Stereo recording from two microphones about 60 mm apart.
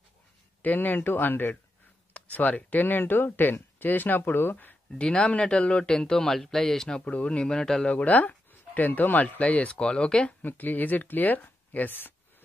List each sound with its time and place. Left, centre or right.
0.6 s speech: left
2.1 s speech: left
4.9 s speech: centre
7.1 s speech: left
10.4 s speech: left